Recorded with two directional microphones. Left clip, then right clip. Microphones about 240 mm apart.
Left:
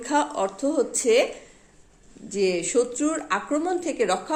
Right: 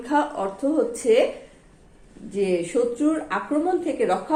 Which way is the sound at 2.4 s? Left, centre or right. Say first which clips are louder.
Even; left.